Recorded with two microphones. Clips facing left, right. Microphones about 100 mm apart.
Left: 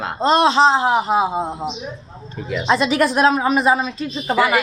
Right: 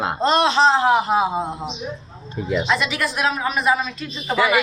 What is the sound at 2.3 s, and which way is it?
Speech, 15° right (ahead or behind).